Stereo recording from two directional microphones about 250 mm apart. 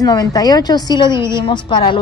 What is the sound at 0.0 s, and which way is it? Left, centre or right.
A woman's voice, centre.